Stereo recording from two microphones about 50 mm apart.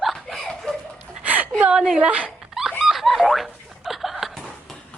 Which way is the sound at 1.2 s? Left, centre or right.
Right.